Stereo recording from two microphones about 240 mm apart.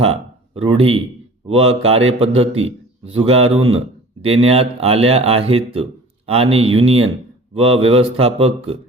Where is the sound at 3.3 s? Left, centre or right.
Right.